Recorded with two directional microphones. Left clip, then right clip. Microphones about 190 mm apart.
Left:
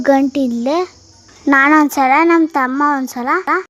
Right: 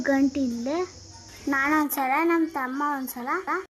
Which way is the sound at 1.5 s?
50° left (ahead or behind).